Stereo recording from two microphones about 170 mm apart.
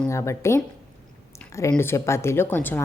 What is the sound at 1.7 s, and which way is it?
Speech, 15° left (ahead or behind).